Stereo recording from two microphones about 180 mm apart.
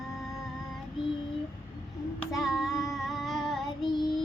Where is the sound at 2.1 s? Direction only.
Centre (ahead or behind).